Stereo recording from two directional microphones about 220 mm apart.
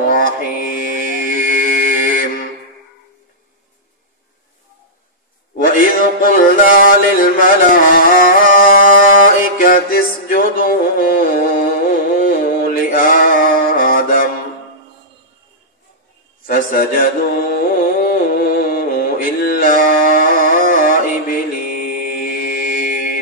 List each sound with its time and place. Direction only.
0.1 s mantra: 40° left (ahead or behind)
5.6 s music: 40° left (ahead or behind)
16.4 s a sound: 40° left (ahead or behind)
18.0 s music: 40° left (ahead or behind)
22.1 s mantra: 40° left (ahead or behind)